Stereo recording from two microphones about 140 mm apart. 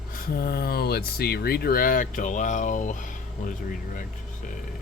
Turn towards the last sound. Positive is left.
turn(degrees=75)  # may be behind; listen again after turning